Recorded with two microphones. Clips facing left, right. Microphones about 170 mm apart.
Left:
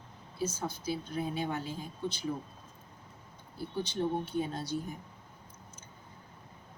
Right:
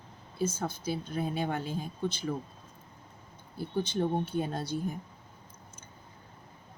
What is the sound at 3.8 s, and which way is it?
Speech, 50° right (ahead or behind).